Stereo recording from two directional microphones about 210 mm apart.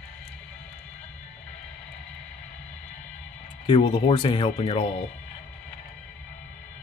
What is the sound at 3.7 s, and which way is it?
Speech, 20° left (ahead or behind).